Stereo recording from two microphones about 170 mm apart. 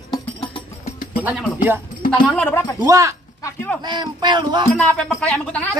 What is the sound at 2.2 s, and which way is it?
Speech, 5° left (ahead or behind).